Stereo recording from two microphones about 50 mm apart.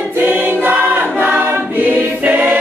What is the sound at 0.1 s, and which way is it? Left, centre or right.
Choir, right.